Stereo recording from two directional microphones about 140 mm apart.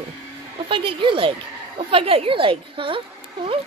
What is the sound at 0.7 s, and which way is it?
A woman's voice, 40° right (ahead or behind).